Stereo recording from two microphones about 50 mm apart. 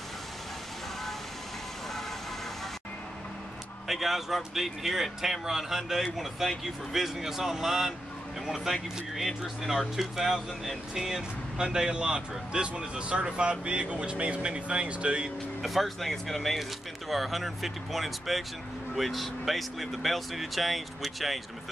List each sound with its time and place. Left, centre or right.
3.8 s speech: centre
9.1 s speech: centre; by 15.3 s right
15.6 s speech: centre